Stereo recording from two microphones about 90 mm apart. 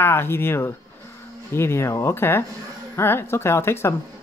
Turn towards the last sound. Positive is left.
turn(degrees=25)  # may be behind; listen again after turning